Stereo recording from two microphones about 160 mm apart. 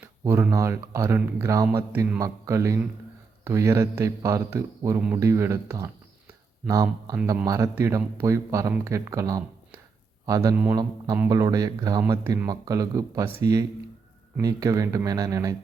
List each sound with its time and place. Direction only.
0.0 s speech: 10° right (ahead or behind)
10.5 s speech: 10° right (ahead or behind)
10.8 s speech: 25° right (ahead or behind)